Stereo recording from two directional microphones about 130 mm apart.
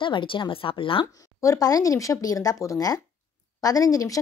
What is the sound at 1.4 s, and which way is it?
A woman's voice, 25° left (ahead or behind).